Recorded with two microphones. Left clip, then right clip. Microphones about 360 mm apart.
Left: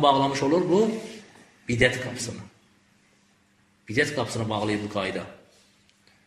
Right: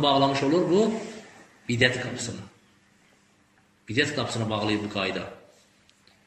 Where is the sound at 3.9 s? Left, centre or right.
Centre.